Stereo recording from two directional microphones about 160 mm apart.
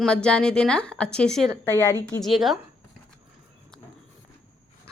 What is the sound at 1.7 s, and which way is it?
Speech, 20° left (ahead or behind).